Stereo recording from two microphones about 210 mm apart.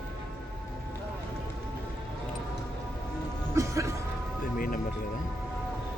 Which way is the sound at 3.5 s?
15° right (ahead or behind).